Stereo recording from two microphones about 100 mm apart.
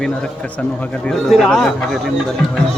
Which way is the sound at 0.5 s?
10° left (ahead or behind).